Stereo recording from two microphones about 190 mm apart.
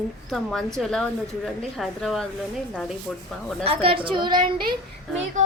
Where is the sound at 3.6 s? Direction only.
30° right (ahead or behind).